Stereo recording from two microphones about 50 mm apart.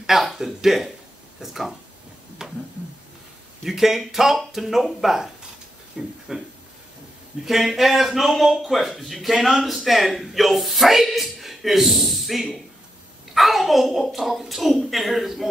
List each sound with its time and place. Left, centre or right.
0.0 s speech: centre
2.4 s a sound: centre
3.6 s speech: centre
7.4 s a man's voice: centre